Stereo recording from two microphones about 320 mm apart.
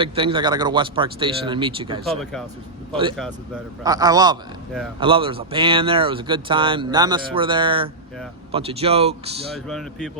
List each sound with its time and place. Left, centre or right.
0.0 s speech: centre
3.2 s speech: centre
9.6 s speech: centre